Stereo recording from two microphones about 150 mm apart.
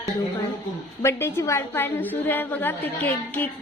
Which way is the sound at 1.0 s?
15° left (ahead or behind).